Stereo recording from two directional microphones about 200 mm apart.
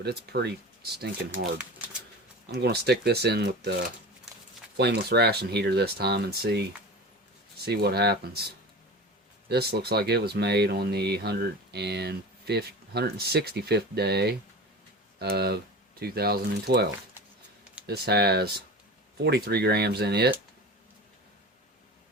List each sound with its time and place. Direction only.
0.0 s speech: 55° right (ahead or behind)
2.6 s speech: 55° right (ahead or behind)
4.8 s speech: 55° right (ahead or behind)
7.6 s speech: 50° right (ahead or behind)
9.5 s speech: 55° right (ahead or behind)